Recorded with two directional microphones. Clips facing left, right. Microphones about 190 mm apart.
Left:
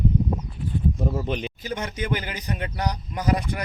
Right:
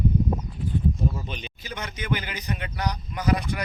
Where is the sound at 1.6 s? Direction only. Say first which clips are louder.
Even; 40° left (ahead or behind).